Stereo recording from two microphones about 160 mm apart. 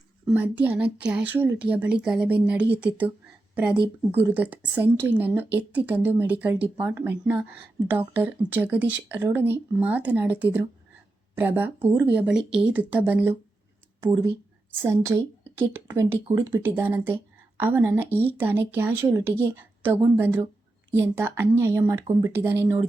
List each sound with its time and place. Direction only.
0.3 s speech: 10° right (ahead or behind)